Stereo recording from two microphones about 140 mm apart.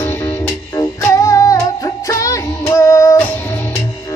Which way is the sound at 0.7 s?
20° left (ahead or behind).